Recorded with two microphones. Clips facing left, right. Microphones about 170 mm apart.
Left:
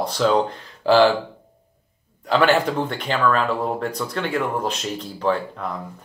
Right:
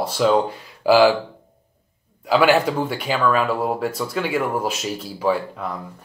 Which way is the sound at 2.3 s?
10° right (ahead or behind).